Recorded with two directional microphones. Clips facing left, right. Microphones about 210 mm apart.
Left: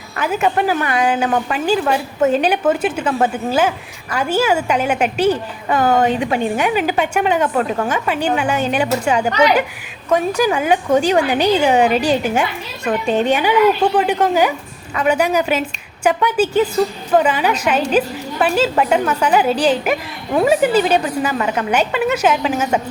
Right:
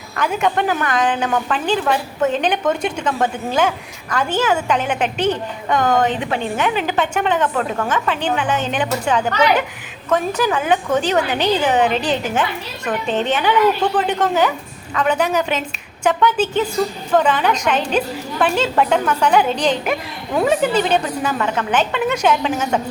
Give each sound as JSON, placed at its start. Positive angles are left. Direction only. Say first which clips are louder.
{"t": 0.2, "sound": "a woman's voice", "louder": "left 1 dB", "side_deg": 5}